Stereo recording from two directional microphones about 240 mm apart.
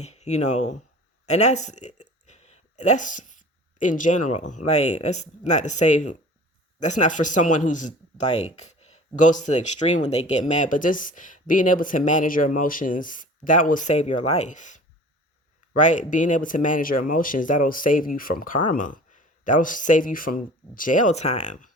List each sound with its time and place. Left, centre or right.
0.0 s speech: left